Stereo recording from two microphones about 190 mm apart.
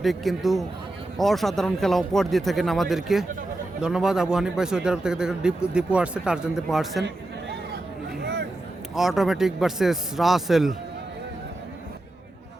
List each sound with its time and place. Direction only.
0.0 s speech: centre (ahead or behind)
8.2 s a sound: 60° right (ahead or behind)
9.0 s speech: centre (ahead or behind)